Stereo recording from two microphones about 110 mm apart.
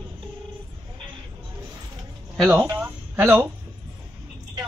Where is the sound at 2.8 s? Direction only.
15° right (ahead or behind).